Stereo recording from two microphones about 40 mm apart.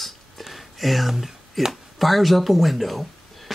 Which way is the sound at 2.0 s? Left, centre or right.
Centre.